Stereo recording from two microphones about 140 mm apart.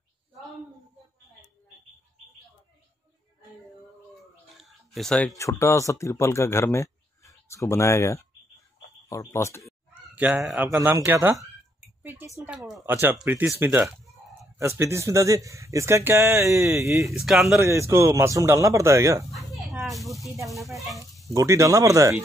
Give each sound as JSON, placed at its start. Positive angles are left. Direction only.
{"t": 4.5, "sound": "a sound", "side_deg": 0}
{"t": 5.4, "sound": "speech", "side_deg": 20}
{"t": 9.9, "sound": "speech", "side_deg": -10}
{"t": 12.0, "sound": "a sound", "side_deg": -15}
{"t": 12.7, "sound": "a man's voice", "side_deg": -15}
{"t": 13.8, "sound": "chicken", "side_deg": 0}
{"t": 14.6, "sound": "a man's voice", "side_deg": -20}
{"t": 17.1, "sound": "speech", "side_deg": -5}
{"t": 17.6, "sound": "a man's voice", "side_deg": -20}
{"t": 19.3, "sound": "a sound", "side_deg": 0}
{"t": 20.7, "sound": "speech", "side_deg": 0}
{"t": 21.3, "sound": "a man's voice", "side_deg": -20}